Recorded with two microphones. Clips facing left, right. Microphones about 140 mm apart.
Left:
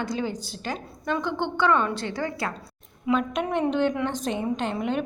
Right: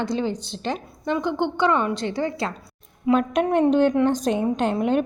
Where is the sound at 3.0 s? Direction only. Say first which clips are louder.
Right 5 dB; 45° right (ahead or behind).